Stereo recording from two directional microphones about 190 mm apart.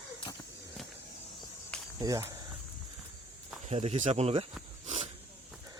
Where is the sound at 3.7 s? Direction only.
35° right (ahead or behind).